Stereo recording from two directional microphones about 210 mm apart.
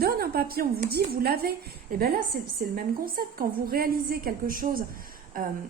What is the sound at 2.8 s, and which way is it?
Speech, 45° right (ahead or behind).